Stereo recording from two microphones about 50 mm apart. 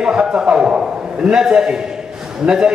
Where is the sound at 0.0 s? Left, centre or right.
Centre.